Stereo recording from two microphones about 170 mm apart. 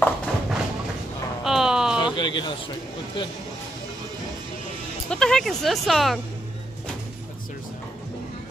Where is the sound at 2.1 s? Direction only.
25° left (ahead or behind).